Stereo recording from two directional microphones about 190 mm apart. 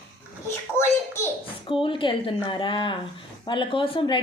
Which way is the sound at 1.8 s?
25° left (ahead or behind).